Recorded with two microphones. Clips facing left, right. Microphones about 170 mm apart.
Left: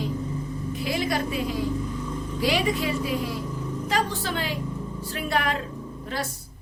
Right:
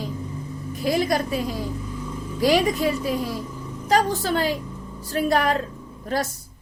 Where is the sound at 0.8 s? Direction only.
40° right (ahead or behind).